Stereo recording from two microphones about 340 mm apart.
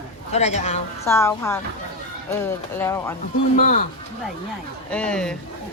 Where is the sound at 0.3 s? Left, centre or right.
Centre.